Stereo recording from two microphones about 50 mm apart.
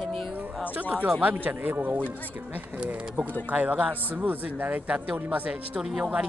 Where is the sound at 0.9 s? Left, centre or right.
Right.